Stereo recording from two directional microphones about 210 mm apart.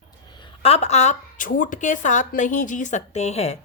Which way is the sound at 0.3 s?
30° left (ahead or behind).